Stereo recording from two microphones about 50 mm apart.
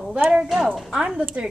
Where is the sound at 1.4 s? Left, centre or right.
Right.